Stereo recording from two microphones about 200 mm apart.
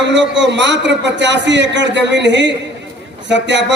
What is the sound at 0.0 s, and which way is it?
A man's voice, 60° right (ahead or behind).